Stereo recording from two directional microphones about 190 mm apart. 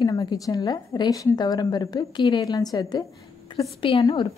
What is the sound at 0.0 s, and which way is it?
A woman's voice, 20° left (ahead or behind).